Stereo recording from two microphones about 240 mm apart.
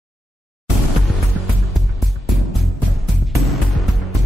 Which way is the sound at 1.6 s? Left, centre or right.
Centre.